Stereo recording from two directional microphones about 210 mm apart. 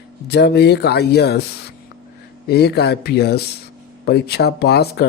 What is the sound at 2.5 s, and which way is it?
Speech, 50° left (ahead or behind).